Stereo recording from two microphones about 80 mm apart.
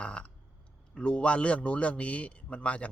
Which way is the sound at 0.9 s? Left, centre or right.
Centre.